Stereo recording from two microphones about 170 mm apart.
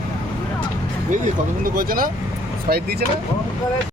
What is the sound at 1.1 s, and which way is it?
Speech, 50° right (ahead or behind).